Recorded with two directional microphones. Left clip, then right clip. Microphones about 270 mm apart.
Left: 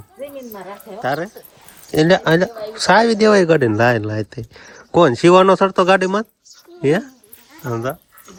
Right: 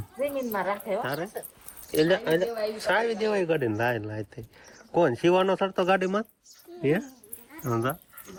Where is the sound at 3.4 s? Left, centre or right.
Centre.